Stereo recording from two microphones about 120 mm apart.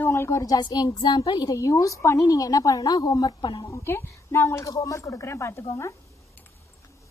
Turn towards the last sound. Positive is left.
turn(degrees=20)  # may be behind; listen again after turning